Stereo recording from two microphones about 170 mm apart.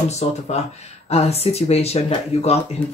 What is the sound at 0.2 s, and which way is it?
Speech, 40° left (ahead or behind).